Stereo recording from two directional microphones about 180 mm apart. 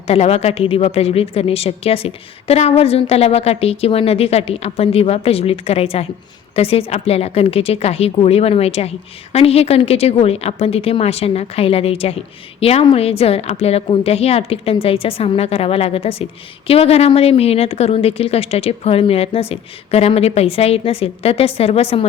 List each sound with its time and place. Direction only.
0.1 s a woman's voice: 35° left (ahead or behind)